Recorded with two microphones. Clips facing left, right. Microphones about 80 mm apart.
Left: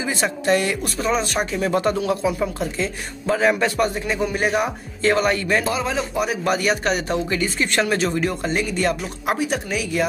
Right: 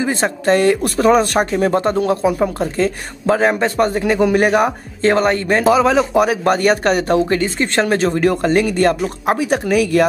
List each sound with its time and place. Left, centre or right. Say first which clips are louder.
0.0 s speech: right 5 dB; right
1.7 s a man's voice: right 4 dB; right
3.5 s a man's voice: right 4 dB; right
4.0 s speech: right 8 dB; right
5.6 s speech: right 10 dB; right
6.1 s speech: right 7 dB; right
7.4 s a man's voice: right 4 dB; right
8.2 s speech: right 8 dB; right
9.2 s a man's voice: right 5 dB; right
9.7 s speech: right 9 dB; right